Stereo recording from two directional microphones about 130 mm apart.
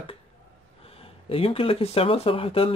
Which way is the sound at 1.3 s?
45° left (ahead or behind).